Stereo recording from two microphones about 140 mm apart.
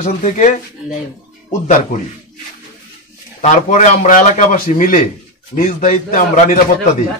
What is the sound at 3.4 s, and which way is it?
A man's voice, 60° left (ahead or behind).